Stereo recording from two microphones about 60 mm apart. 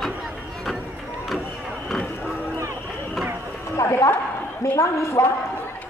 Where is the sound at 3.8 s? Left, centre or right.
Left.